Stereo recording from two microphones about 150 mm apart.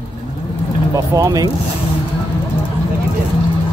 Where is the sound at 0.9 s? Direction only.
25° right (ahead or behind).